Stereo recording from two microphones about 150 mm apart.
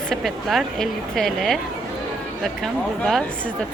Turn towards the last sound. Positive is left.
turn(degrees=0)  # may be behind; listen again after turning